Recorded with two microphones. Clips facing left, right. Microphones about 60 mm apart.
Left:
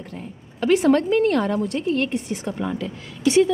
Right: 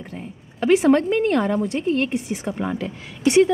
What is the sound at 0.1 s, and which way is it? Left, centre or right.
A woman's voice, centre.